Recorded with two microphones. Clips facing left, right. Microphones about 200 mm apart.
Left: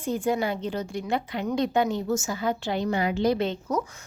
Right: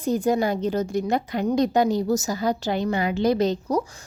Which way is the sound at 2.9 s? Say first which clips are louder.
Left 1 dB; 70° right (ahead or behind).